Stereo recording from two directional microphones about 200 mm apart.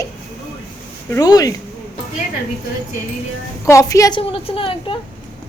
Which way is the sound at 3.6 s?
15° left (ahead or behind).